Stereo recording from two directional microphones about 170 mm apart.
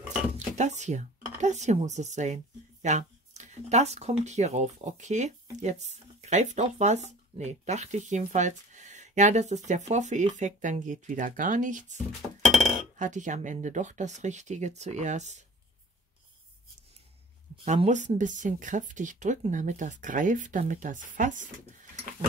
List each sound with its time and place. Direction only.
0.6 s speech: 45° right (ahead or behind)
17.6 s speech: 45° right (ahead or behind)